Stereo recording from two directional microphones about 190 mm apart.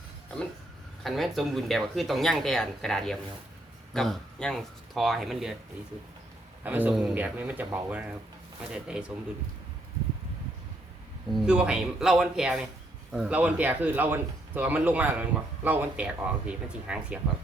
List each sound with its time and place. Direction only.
1.0 s speech: centre (ahead or behind)
6.6 s speech: 10° right (ahead or behind)
11.3 s speech: centre (ahead or behind)